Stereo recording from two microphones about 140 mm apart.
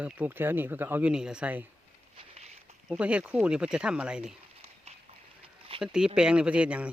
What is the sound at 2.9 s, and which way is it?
Speech, 10° right (ahead or behind).